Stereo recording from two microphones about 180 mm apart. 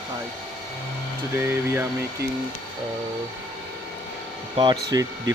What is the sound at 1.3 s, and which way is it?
Speech, 10° right (ahead or behind).